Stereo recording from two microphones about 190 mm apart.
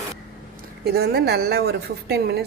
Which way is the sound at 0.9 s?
55° right (ahead or behind).